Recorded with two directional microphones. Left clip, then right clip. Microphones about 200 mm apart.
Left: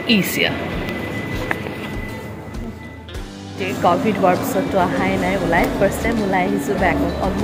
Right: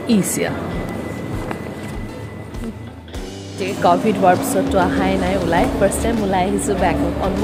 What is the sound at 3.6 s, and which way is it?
Speech, 20° right (ahead or behind).